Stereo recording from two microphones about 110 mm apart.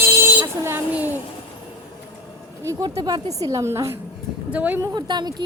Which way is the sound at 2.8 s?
35° right (ahead or behind).